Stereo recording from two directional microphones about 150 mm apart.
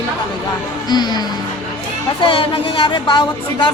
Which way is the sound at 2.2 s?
35° left (ahead or behind).